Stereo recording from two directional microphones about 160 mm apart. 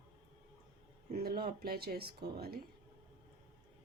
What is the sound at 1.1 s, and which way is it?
Speech, 75° right (ahead or behind).